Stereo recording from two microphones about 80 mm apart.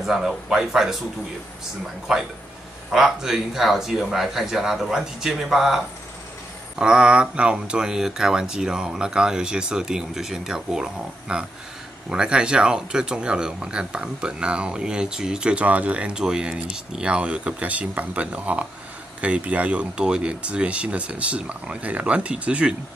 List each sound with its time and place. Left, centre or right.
0.0 s speech: centre
2.1 s speech: centre
6.8 s speech: centre